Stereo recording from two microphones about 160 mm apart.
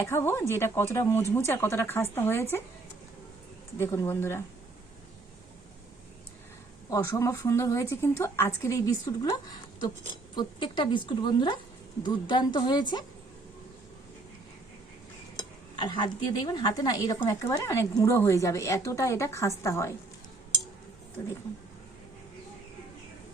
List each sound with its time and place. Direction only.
0.0 s speech: 15° left (ahead or behind)
3.8 s speech: 15° left (ahead or behind)
6.9 s speech: 20° left (ahead or behind)
15.4 s speech: 30° left (ahead or behind)